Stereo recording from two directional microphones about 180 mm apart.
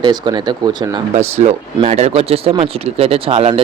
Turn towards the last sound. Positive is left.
turn(degrees=-30)  # may be behind; listen again after turning